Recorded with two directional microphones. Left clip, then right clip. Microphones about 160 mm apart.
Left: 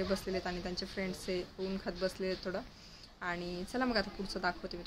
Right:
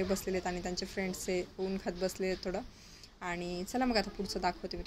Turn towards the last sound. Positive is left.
turn(degrees=-15)  # may be behind; listen again after turning